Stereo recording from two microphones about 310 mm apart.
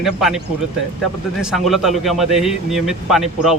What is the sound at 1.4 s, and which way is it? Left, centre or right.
A man's voice, centre.